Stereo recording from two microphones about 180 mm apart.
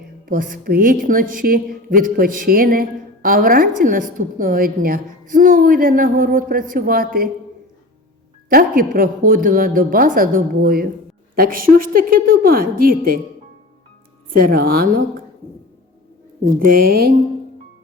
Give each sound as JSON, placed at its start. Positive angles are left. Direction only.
{"t": 0.3, "sound": "a woman's voice", "side_deg": -50}
{"t": 8.4, "sound": "a woman's voice", "side_deg": -55}
{"t": 14.3, "sound": "speech", "side_deg": -55}
{"t": 16.4, "sound": "a woman's voice", "side_deg": -50}